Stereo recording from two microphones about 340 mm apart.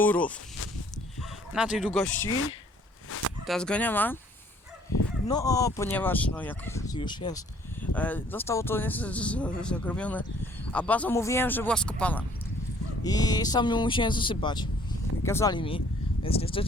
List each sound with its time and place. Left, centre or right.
0.0 s speech: centre
1.5 s speech: centre
3.4 s speech: centre
5.3 s speech: centre